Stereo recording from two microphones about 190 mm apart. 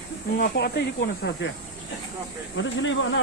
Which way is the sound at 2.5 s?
80° left.